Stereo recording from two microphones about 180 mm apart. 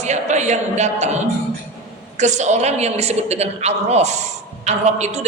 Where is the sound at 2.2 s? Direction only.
40° right (ahead or behind).